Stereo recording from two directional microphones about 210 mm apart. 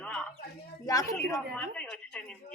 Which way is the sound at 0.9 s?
15° left (ahead or behind).